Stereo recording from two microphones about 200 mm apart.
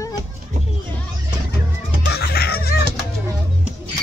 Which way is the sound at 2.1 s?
50° left (ahead or behind).